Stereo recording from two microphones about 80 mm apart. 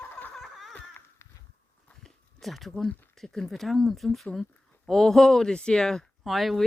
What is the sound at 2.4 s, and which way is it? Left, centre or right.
Speech, centre.